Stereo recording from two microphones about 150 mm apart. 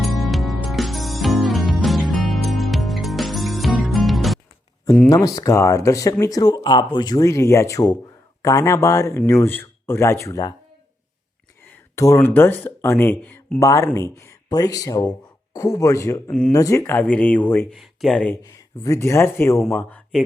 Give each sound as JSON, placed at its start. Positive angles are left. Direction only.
{"t": 0.0, "sound": "music", "side_deg": 0}
{"t": 5.0, "sound": "speech", "side_deg": 25}
{"t": 11.7, "sound": "a sound", "side_deg": 20}
{"t": 12.3, "sound": "speech", "side_deg": 10}
{"t": 17.7, "sound": "speech", "side_deg": 0}
{"t": 18.4, "sound": "speech", "side_deg": 20}